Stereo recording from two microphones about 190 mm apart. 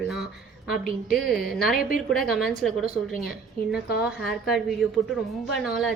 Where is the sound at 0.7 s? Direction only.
50° left (ahead or behind).